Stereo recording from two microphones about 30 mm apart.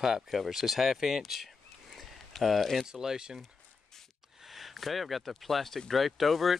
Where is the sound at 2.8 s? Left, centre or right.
Centre.